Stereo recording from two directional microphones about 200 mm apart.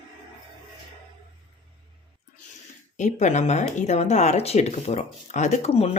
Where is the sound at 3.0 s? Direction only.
35° left (ahead or behind).